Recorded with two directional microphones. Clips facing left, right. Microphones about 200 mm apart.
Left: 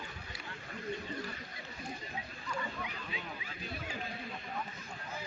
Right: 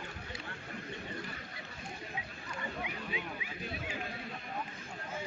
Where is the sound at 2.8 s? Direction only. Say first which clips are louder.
Right 3 dB; 15° right (ahead or behind).